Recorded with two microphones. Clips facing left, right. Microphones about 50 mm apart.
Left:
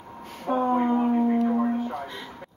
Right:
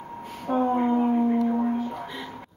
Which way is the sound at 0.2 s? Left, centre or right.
Centre.